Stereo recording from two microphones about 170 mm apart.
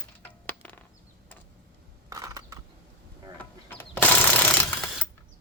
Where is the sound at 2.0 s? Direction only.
20° right (ahead or behind).